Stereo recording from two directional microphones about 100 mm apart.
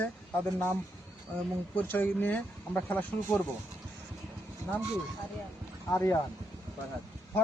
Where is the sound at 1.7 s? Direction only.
20° left (ahead or behind).